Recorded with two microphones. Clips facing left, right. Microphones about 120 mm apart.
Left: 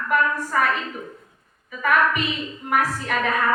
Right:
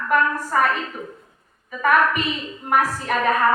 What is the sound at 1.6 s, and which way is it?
A woman's voice, 45° right (ahead or behind).